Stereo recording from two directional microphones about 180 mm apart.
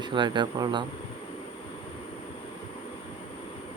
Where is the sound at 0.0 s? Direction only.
25° right (ahead or behind).